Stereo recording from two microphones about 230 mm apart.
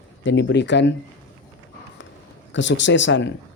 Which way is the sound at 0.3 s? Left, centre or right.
Left.